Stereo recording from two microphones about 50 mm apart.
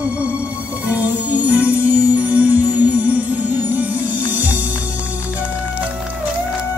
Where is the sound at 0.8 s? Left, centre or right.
Right.